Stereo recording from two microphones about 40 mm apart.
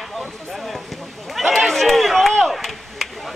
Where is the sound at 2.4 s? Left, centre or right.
Centre.